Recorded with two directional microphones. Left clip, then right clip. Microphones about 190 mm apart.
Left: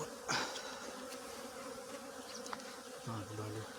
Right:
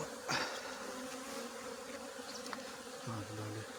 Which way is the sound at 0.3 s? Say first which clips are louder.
Even; 20° right (ahead or behind).